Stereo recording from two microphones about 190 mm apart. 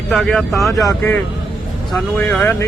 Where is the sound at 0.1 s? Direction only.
Centre (ahead or behind).